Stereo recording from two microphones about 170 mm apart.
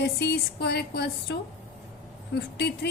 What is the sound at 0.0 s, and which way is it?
Speech, 80° left.